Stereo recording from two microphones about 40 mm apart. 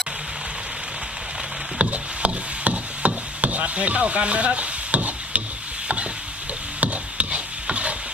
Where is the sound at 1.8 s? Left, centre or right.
Right.